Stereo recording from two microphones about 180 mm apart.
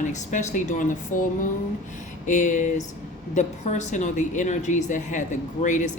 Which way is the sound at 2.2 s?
45° left (ahead or behind).